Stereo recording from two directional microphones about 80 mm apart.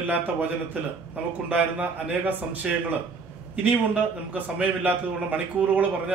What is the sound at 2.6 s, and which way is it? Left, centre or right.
Speech, centre.